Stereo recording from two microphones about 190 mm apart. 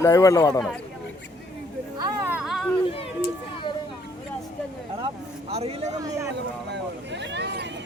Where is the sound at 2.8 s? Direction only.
30° left (ahead or behind).